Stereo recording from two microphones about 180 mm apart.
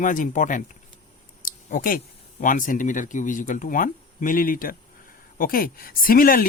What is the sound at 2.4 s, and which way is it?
Speech, 45° left (ahead or behind).